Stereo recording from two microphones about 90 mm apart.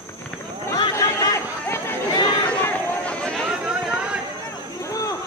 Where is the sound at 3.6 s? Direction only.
10° right (ahead or behind).